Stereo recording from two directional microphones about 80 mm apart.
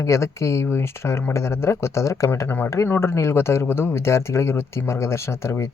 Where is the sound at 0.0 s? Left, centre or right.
Left.